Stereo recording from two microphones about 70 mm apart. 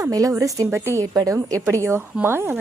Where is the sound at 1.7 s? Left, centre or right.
Right.